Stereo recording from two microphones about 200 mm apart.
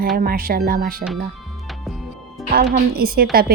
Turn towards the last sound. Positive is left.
turn(degrees=-50)  # may be behind; listen again after turning